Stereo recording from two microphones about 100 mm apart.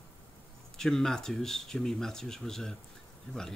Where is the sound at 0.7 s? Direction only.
5° left (ahead or behind).